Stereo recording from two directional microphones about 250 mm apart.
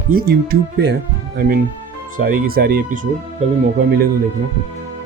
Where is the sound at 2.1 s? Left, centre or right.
Right.